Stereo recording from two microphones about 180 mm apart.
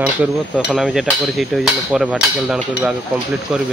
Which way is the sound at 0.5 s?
5° right (ahead or behind).